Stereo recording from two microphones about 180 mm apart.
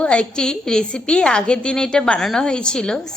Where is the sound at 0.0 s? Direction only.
5° left (ahead or behind).